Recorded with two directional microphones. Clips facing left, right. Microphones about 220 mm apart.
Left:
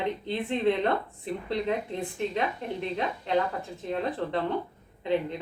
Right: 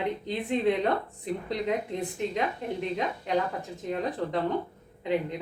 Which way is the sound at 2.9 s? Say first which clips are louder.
Left 2 dB; 10° right (ahead or behind).